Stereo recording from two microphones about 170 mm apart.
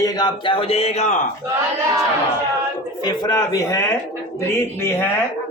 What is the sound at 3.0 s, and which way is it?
Speech, 20° left (ahead or behind).